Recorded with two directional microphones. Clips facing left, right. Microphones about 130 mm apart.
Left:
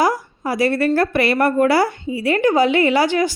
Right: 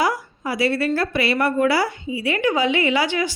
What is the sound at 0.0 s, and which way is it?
A woman's voice, 40° left (ahead or behind).